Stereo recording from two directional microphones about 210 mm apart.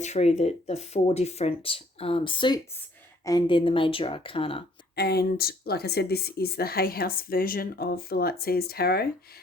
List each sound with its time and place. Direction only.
0.0 s speech: 30° left (ahead or behind)
4.9 s speech: 50° left (ahead or behind)